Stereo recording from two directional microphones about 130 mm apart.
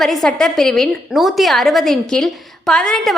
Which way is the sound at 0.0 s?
Centre (ahead or behind).